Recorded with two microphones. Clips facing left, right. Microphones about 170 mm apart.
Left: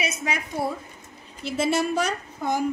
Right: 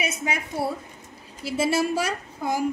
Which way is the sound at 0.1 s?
10° right (ahead or behind).